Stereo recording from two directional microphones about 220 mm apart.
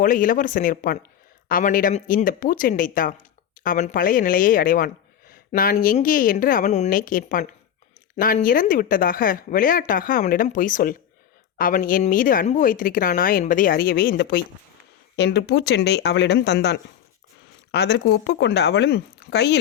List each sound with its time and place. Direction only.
0.0 s speech: 40° left (ahead or behind)